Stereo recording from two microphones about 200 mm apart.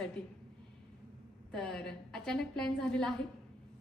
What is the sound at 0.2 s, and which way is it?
Speech, 5° left (ahead or behind).